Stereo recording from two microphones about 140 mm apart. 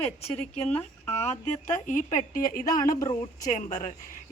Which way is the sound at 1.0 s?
50° left (ahead or behind).